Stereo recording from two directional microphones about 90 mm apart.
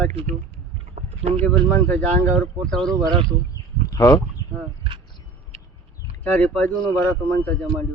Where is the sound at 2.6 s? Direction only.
5° left (ahead or behind).